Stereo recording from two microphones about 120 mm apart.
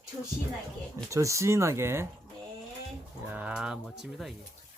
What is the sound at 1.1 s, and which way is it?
Speech, 25° right (ahead or behind).